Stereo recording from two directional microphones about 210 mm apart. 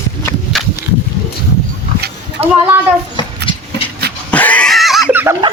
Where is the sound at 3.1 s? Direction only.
25° left (ahead or behind).